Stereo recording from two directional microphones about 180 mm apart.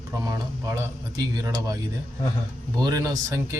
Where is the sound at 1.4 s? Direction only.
20° right (ahead or behind).